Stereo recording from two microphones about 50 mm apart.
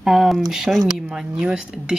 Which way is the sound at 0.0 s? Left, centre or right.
Centre.